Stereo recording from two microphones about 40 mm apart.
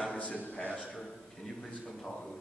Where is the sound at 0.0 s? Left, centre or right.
Left.